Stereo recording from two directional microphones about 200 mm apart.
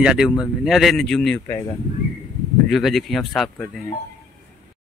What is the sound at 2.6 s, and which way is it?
A man's voice, centre (ahead or behind).